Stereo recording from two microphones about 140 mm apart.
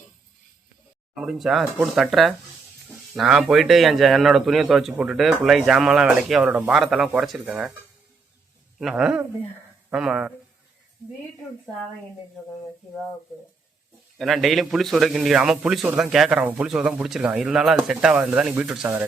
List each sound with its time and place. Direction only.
1.1 s a man's voice: 5° right (ahead or behind)
8.8 s a man's voice: centre (ahead or behind)
14.2 s a man's voice: centre (ahead or behind)